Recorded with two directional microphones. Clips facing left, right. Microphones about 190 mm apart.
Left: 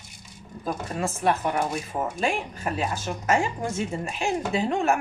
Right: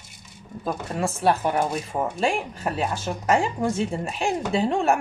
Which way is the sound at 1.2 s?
35° right (ahead or behind).